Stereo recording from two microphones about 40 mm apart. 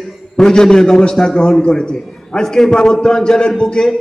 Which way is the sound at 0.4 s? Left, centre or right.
Centre.